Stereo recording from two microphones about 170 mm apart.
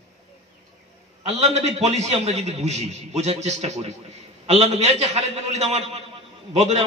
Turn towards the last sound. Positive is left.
turn(degrees=-40)  # may be behind; listen again after turning